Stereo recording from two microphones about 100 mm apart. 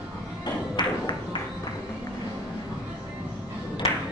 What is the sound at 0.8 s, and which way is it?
Music, 50° left (ahead or behind).